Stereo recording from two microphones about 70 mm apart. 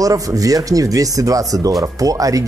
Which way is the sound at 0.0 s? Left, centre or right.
Right.